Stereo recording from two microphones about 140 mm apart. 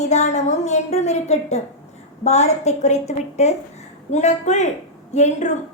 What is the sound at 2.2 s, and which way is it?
A woman's voice, 55° left (ahead or behind).